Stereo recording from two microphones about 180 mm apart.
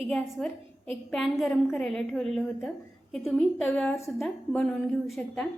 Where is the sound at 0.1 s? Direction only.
5° left (ahead or behind).